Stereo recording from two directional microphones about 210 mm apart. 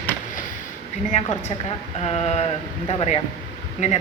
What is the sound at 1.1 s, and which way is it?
Speech, 35° left (ahead or behind).